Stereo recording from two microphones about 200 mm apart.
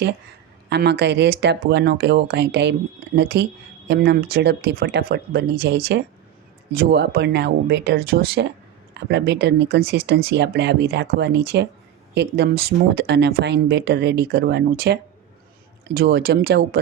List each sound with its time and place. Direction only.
0.7 s speech: 55° right (ahead or behind)
16.0 s speech: 50° right (ahead or behind)